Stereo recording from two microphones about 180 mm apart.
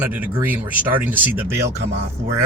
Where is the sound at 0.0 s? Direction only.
10° right (ahead or behind).